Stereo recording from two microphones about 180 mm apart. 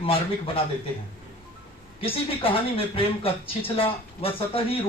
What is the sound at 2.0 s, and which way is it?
Speech, 30° left (ahead or behind).